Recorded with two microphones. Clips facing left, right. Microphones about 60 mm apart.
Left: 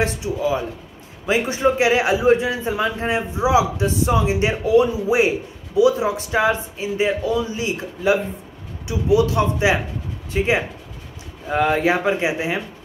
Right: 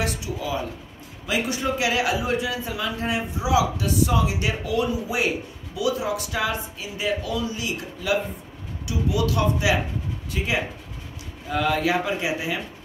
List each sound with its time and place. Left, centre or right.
0.0 s a man's voice: left